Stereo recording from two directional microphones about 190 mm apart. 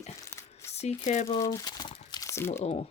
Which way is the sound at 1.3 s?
20° left (ahead or behind).